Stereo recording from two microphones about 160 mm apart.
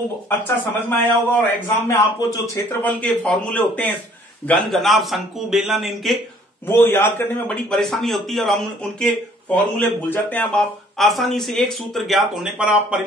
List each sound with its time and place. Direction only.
0.4 s a man's voice: 10° left (ahead or behind)
3.0 s a man's voice: 10° left (ahead or behind)
6.7 s a man's voice: 15° left (ahead or behind); by 13.0 s 5° right (ahead or behind)